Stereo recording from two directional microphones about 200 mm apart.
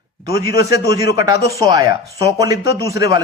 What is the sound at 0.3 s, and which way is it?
Speech, 15° right (ahead or behind).